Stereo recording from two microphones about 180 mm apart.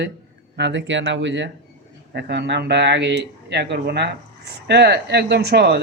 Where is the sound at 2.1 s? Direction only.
70° right (ahead or behind).